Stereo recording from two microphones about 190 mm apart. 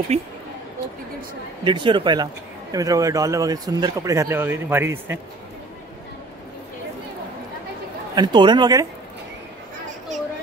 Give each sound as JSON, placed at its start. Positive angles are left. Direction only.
{"t": 0.1, "sound": "speech", "side_deg": -35}
{"t": 1.6, "sound": "speech", "side_deg": -25}
{"t": 8.1, "sound": "speech", "side_deg": -25}